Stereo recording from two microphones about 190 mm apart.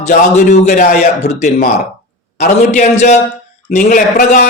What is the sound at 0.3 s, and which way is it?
A man's voice, 40° left (ahead or behind).